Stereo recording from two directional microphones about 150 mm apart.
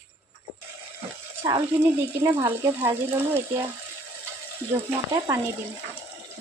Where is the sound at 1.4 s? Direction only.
25° right (ahead or behind).